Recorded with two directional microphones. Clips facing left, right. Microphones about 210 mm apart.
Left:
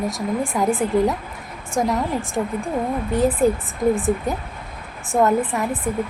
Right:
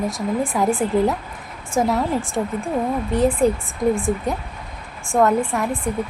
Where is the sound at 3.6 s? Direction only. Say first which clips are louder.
Even; 20° left (ahead or behind).